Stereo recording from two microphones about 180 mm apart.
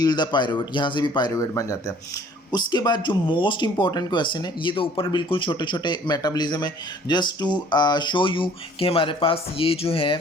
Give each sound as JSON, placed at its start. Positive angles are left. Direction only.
{"t": 0.0, "sound": "speech", "side_deg": 25}